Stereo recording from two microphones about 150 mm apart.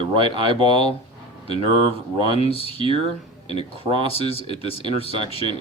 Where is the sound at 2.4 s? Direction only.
40° left (ahead or behind).